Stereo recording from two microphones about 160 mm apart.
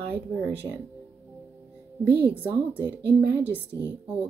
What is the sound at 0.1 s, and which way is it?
Speech, 10° right (ahead or behind).